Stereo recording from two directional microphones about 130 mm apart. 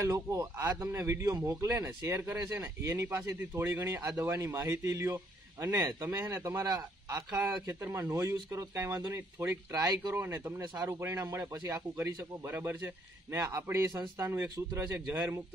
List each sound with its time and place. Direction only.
0.0 s a man's voice: 25° right (ahead or behind)
10.6 s speech: 30° right (ahead or behind)
10.9 s a man's voice: 20° right (ahead or behind)